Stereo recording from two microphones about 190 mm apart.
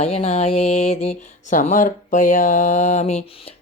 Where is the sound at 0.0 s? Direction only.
35° left (ahead or behind).